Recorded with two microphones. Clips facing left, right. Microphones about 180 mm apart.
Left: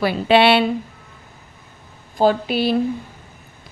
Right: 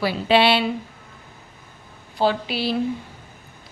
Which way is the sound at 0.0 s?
55° left (ahead or behind).